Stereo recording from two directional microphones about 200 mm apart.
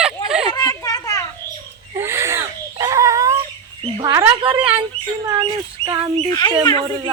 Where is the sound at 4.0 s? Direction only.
20° right (ahead or behind).